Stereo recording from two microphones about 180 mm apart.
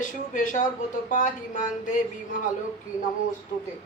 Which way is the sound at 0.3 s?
45° left (ahead or behind).